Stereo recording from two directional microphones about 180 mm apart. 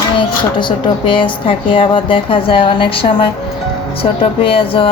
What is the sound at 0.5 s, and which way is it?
A woman's voice, 25° left (ahead or behind).